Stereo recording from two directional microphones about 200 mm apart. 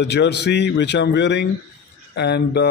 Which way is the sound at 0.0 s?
60° left (ahead or behind).